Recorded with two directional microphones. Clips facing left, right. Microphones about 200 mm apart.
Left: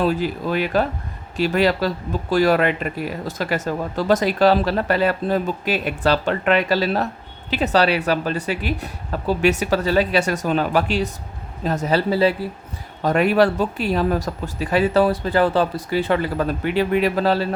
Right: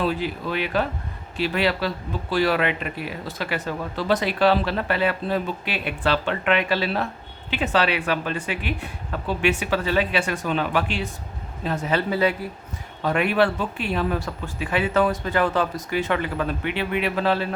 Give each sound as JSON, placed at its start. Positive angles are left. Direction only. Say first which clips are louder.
{"t": 0.0, "sound": "speech", "louder": "left 4 dB", "side_deg": 40}